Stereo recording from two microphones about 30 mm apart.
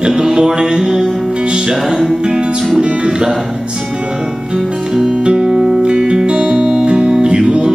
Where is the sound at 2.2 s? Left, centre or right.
Right.